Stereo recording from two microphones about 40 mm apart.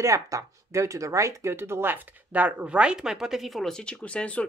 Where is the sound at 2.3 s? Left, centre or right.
Right.